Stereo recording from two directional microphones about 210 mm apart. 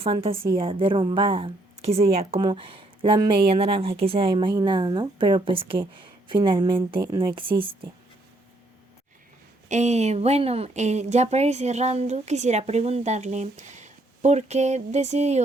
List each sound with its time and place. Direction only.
0.0 s a woman's voice: 25° right (ahead or behind)
9.6 s speech: 35° right (ahead or behind)